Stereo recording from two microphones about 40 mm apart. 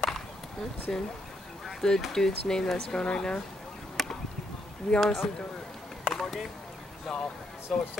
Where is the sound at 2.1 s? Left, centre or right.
Centre.